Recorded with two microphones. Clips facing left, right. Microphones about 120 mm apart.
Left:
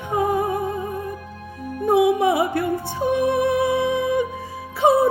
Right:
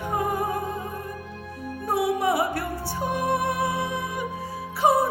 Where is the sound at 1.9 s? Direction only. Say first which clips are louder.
Left 7 dB; 20° left (ahead or behind).